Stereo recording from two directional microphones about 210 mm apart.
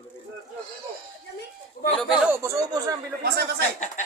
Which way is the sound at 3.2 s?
50° right (ahead or behind).